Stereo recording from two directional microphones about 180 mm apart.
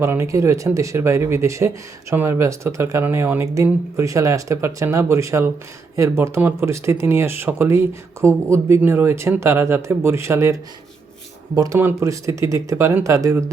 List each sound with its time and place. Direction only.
0.0 s speech: 15° right (ahead or behind)